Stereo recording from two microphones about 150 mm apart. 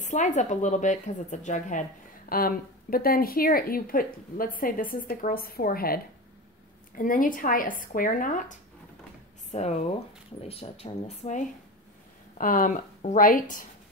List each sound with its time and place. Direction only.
0.0 s a woman's voice: 55° left (ahead or behind); by 5.9 s 80° left
7.0 s speech: 65° left (ahead or behind)
12.4 s speech: 65° left (ahead or behind)